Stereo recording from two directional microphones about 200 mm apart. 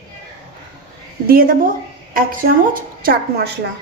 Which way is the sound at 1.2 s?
45° right (ahead or behind).